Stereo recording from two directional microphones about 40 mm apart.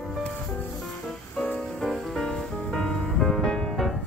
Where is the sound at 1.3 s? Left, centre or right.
Left.